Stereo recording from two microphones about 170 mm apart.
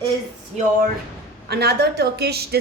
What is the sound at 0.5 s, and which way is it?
Speech, centre (ahead or behind).